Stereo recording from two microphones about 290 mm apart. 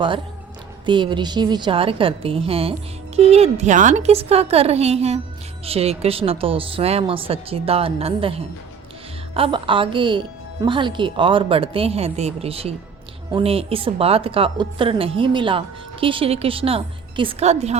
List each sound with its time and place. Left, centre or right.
0.9 s a woman's voice: centre